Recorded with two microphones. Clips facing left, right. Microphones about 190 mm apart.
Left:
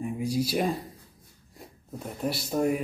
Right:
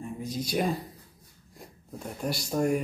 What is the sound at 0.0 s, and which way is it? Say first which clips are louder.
Speech: left 6 dB; 10° left (ahead or behind).